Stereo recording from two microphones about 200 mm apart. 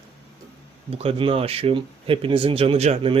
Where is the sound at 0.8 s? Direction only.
30° right (ahead or behind).